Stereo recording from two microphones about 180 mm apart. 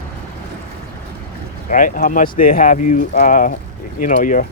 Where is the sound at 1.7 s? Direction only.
45° left (ahead or behind).